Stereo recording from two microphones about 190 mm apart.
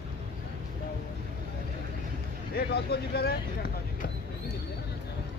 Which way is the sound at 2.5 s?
55° left (ahead or behind).